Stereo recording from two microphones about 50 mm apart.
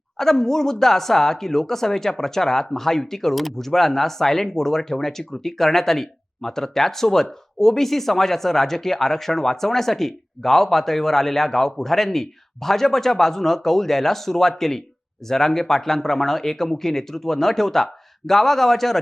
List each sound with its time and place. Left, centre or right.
0.2 s a man's voice: centre